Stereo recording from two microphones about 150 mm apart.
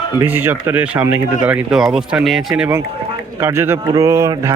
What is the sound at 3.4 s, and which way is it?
Speech, 15° right (ahead or behind).